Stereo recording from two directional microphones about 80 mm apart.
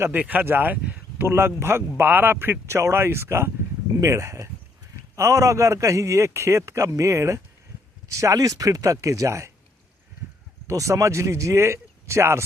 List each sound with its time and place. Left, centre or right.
0.1 s speech: centre
1.3 s speech: right
10.7 s speech: right